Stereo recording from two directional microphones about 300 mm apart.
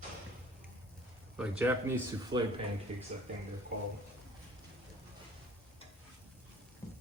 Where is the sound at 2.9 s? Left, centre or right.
Right.